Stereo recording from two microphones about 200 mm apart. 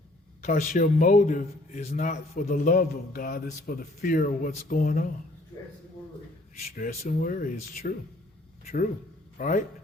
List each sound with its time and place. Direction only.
0.4 s a man's voice: 40° left (ahead or behind)
6.7 s a man's voice: 45° left (ahead or behind)
9.4 s a man's voice: 40° left (ahead or behind)